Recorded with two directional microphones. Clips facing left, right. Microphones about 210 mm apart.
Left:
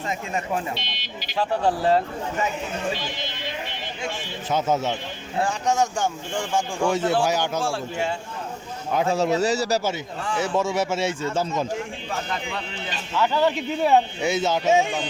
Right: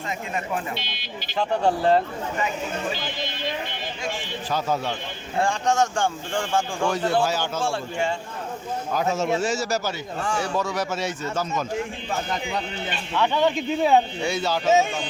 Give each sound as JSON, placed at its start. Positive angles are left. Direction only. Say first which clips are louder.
{"t": 0.9, "sound": "speech", "louder": "right 1 dB", "side_deg": 0}
{"t": 4.5, "sound": "speech", "louder": "left 3 dB", "side_deg": 20}
{"t": 5.4, "sound": "speech", "louder": "right 1 dB", "side_deg": 5}
{"t": 7.6, "sound": "speech", "louder": "even", "side_deg": 5}
{"t": 8.9, "sound": "a man's voice", "louder": "left 3 dB", "side_deg": 25}
{"t": 10.2, "sound": "a man's voice", "louder": "right 1 dB", "side_deg": -45}
{"t": 10.4, "sound": "speech", "louder": "left 3 dB", "side_deg": 25}
{"t": 13.1, "sound": "speech", "louder": "even", "side_deg": 5}
{"t": 14.3, "sound": "speech", "louder": "left 1 dB", "side_deg": 20}